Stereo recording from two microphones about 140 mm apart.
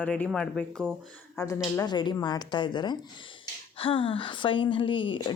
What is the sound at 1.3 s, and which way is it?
Speech, 20° left (ahead or behind).